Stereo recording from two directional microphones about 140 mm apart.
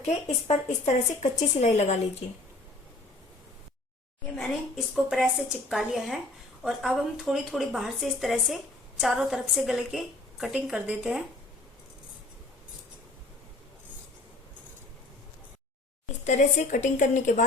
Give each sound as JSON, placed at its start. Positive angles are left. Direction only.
{"t": 0.0, "sound": "a woman's voice", "side_deg": 55}
{"t": 4.4, "sound": "a woman's voice", "side_deg": 0}
{"t": 16.2, "sound": "a woman's voice", "side_deg": 55}